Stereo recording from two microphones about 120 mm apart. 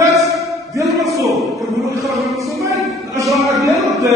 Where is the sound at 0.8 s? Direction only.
Centre (ahead or behind).